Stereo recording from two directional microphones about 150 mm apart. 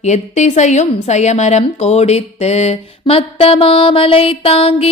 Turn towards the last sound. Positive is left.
turn(degrees=40)  # may be behind; listen again after turning